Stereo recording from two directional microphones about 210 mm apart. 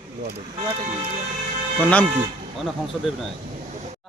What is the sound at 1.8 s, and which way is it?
A man's voice, 5° left (ahead or behind).